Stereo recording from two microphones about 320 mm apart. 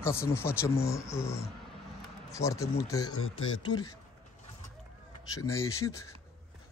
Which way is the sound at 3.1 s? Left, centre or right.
Left.